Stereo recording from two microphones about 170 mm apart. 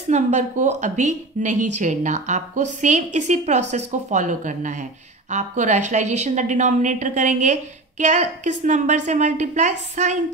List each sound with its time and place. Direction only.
0.1 s a woman's voice: 45° right (ahead or behind)